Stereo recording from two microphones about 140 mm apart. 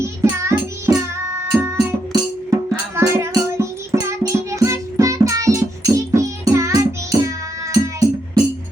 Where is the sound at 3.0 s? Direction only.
20° right (ahead or behind).